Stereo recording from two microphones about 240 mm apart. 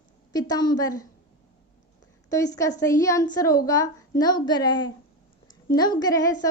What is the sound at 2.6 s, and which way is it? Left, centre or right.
A woman's voice, centre.